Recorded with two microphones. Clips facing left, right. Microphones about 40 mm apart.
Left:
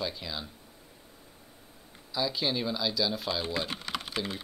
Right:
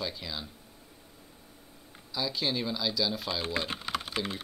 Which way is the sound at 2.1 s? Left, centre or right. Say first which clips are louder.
Left 1 dB; centre.